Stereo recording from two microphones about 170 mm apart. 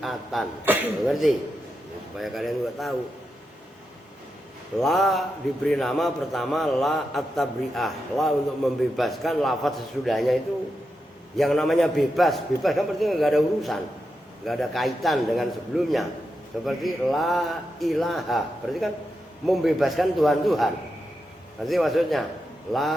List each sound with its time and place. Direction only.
0.0 s a man's voice: centre (ahead or behind)
0.6 s speech: 10° right (ahead or behind)
1.0 s a man's voice: centre (ahead or behind)
4.8 s a man's voice: centre (ahead or behind)
11.3 s a man's voice: centre (ahead or behind)